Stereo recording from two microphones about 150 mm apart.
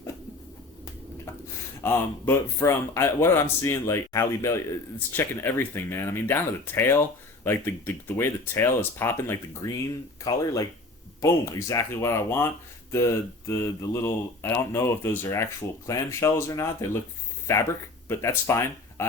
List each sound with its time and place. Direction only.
1.8 s speech: 15° left (ahead or behind)